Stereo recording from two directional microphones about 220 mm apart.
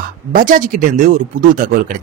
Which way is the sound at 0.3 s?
40° right (ahead or behind).